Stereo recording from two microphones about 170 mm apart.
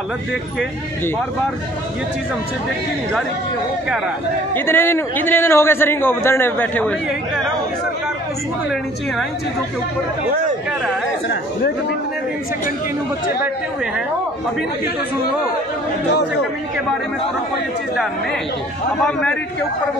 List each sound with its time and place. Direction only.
4.6 s a man's voice: 15° left (ahead or behind)
18.9 s a man's voice: 5° left (ahead or behind)